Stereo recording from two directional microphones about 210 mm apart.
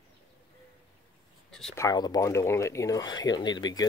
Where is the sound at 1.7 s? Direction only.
15° left (ahead or behind).